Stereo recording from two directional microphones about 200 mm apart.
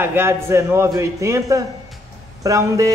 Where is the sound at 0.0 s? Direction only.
10° right (ahead or behind).